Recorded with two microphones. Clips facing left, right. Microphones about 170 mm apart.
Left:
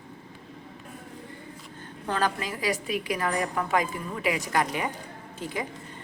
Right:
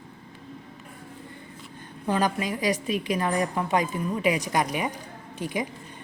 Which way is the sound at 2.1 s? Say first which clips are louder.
Right 3 dB; 15° right (ahead or behind).